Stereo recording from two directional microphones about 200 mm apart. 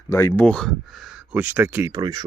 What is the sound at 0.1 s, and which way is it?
Speech, 15° left (ahead or behind).